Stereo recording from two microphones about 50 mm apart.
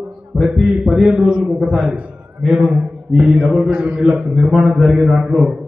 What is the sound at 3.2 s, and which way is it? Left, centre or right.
A man's voice, centre.